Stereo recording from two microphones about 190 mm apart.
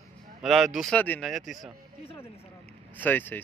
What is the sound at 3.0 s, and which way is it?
Speech, 10° left (ahead or behind).